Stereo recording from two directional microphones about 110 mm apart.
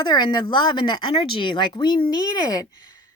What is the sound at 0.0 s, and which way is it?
Speech, 45° left (ahead or behind).